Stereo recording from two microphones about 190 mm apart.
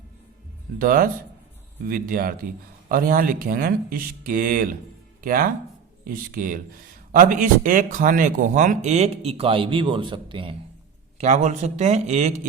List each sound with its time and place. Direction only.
0.8 s speech: 50° right (ahead or behind); by 10.5 s 25° right (ahead or behind)
11.2 s speech: 40° right (ahead or behind)